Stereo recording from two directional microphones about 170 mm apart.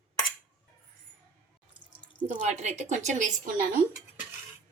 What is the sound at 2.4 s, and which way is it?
A woman's voice, 40° right (ahead or behind).